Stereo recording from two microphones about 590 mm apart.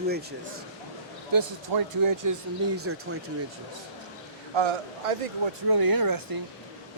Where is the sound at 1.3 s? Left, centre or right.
Right.